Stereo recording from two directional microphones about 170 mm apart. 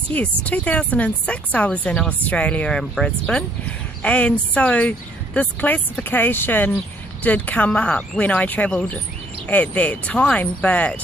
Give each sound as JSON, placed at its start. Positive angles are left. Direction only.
{"t": 0.1, "sound": "speech", "side_deg": 10}